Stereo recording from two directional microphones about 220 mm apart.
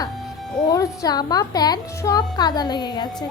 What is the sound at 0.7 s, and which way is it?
A woman's voice, 15° left (ahead or behind).